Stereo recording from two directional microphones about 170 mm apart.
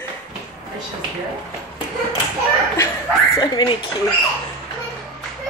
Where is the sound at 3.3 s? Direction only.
25° left (ahead or behind).